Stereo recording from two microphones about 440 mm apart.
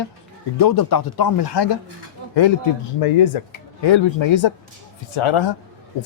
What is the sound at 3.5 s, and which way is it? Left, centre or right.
Speech, left.